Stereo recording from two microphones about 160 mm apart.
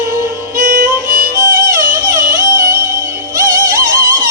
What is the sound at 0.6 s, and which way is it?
Music, 55° right (ahead or behind).